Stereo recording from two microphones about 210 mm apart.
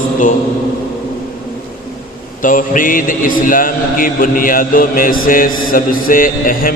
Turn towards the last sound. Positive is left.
turn(degrees=45)  # may be behind; listen again after turning